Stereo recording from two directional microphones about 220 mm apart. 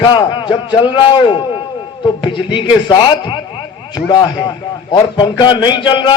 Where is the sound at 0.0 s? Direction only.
20° left (ahead or behind).